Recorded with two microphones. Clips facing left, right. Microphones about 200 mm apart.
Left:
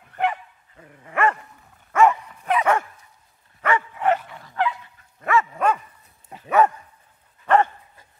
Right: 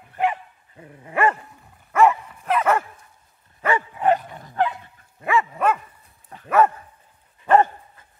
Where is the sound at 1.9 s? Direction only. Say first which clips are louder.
Even; 5° right (ahead or behind).